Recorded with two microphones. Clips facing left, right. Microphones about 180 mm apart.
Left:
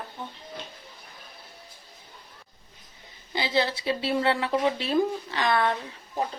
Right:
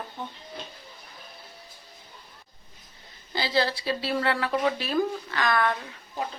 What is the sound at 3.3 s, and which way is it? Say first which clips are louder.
Speech: even; 20° left (ahead or behind).